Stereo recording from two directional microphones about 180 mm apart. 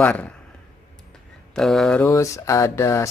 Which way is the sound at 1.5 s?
Centre (ahead or behind).